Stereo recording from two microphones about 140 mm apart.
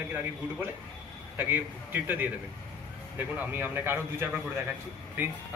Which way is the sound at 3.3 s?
15° right (ahead or behind).